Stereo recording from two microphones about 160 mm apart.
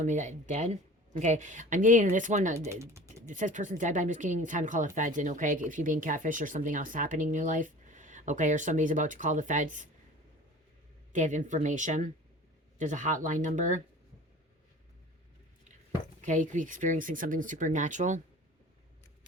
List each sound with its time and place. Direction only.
0.0 s speech: 50° right (ahead or behind)
2.6 s speech: 20° right (ahead or behind)
3.2 s speech: 50° right (ahead or behind)
11.1 s speech: 50° right (ahead or behind)
16.2 s speech: 50° right (ahead or behind)